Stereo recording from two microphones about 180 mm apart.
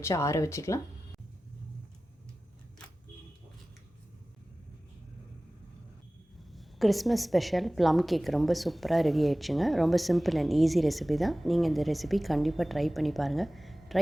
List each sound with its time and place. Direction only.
0.0 s speech: 15° left (ahead or behind)
6.5 s a woman's voice: centre (ahead or behind)